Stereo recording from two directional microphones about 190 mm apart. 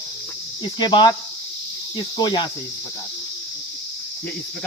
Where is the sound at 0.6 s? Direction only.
25° left (ahead or behind).